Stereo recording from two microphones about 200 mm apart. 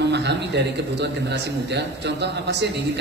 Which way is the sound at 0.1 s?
60° right (ahead or behind).